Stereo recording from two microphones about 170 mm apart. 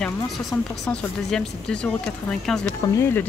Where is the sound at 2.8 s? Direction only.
20° left (ahead or behind).